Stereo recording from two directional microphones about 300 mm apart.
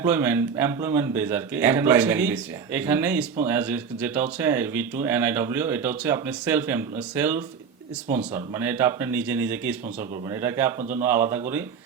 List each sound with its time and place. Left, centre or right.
0.0 s speech: centre